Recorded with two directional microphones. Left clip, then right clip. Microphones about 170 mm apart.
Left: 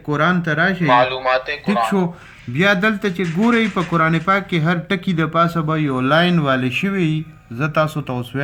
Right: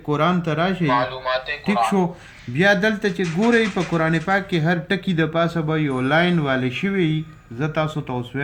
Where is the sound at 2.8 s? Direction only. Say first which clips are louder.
Left 2 dB; 30° left (ahead or behind).